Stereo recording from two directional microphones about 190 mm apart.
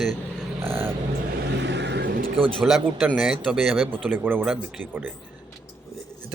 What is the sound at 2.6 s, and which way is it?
A man's voice, centre (ahead or behind).